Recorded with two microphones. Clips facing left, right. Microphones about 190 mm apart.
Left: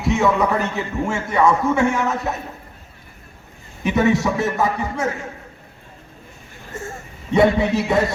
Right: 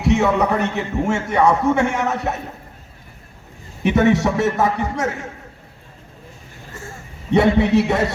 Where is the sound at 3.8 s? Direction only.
70° right (ahead or behind).